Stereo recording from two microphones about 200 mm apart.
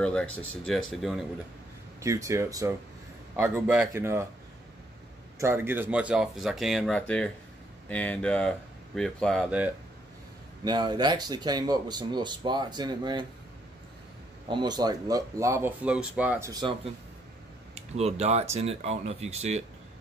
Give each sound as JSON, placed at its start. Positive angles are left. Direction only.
{"t": 0.0, "sound": "speech", "side_deg": 5}
{"t": 2.0, "sound": "speech", "side_deg": -15}
{"t": 5.4, "sound": "speech", "side_deg": -10}
{"t": 10.6, "sound": "speech", "side_deg": -20}
{"t": 14.5, "sound": "speech", "side_deg": -20}
{"t": 17.7, "sound": "speech", "side_deg": -30}